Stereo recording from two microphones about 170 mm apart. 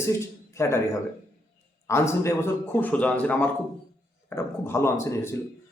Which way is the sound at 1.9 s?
15° left (ahead or behind).